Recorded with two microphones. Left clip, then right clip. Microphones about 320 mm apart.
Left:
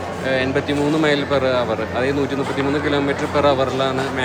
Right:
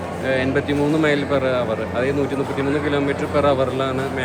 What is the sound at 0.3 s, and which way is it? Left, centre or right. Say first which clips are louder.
Speech: left 1 dB; centre.